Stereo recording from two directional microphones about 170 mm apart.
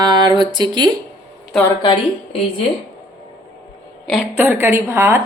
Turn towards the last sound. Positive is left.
turn(degrees=-15)  # may be behind; listen again after turning